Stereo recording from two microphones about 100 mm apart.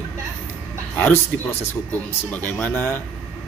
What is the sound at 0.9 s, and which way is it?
Speech, 20° left (ahead or behind).